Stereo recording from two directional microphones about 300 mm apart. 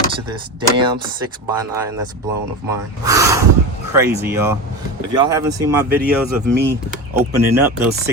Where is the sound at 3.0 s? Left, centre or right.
Centre.